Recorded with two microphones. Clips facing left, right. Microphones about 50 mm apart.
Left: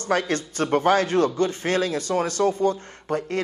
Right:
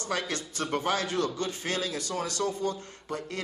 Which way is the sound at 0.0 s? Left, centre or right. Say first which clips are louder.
Left 8 dB; left.